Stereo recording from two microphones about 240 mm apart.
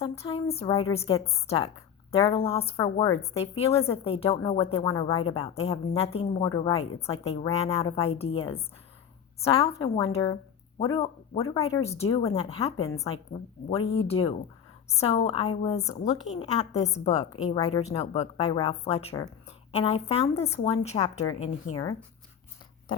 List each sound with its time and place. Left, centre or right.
0.0 s a woman's voice: left
11.6 s a woman's voice: left
13.3 s a woman's voice: centre